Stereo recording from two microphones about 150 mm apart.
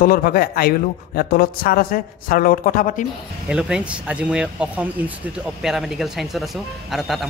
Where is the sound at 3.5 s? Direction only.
5° right (ahead or behind).